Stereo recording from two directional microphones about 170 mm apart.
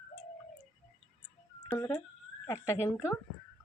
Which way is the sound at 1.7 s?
10° left (ahead or behind).